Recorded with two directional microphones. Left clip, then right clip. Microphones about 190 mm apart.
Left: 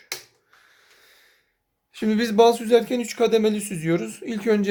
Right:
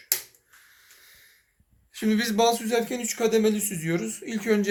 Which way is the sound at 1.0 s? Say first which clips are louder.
Even; 55° left (ahead or behind).